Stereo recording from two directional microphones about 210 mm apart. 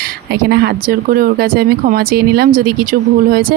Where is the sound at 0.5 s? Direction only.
50° right (ahead or behind).